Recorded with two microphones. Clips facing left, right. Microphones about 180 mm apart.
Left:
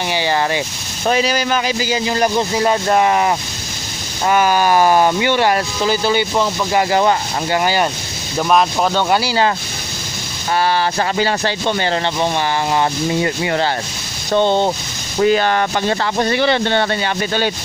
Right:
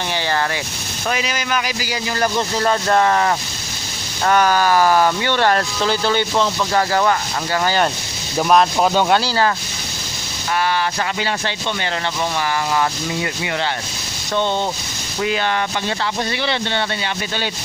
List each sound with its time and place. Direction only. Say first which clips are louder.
0.1 s speech: left 3 dB; 15° left (ahead or behind)
1.0 s speech: left 7 dB; 35° left (ahead or behind); by 7.9 s 15° left (ahead or behind)
8.4 s speech: even; centre (ahead or behind)
9.2 s speech: left 2 dB; 15° left (ahead or behind)
10.5 s speech: left 3 dB; 30° left (ahead or behind)